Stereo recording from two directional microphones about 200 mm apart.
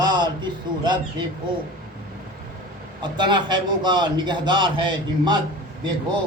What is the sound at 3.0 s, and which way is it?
A man's voice, 25° right (ahead or behind).